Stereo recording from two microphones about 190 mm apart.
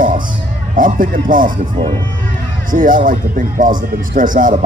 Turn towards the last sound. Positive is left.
turn(degrees=-45)  # may be behind; listen again after turning